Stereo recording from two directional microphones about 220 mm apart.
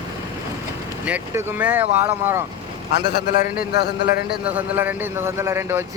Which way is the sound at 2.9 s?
50° left (ahead or behind).